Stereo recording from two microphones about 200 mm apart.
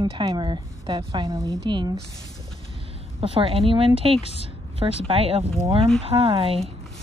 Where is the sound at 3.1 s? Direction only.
25° right (ahead or behind).